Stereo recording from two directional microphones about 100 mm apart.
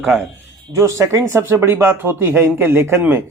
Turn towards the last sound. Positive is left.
turn(degrees=-20)  # may be behind; listen again after turning